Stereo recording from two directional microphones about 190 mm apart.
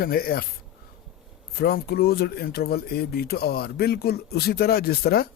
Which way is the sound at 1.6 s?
55° left (ahead or behind).